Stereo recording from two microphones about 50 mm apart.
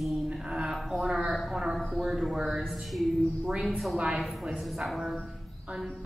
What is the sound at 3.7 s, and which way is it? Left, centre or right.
Mantra, centre.